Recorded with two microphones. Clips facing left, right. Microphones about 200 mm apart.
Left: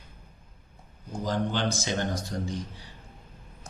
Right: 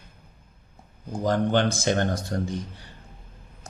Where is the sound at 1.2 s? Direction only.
55° right (ahead or behind).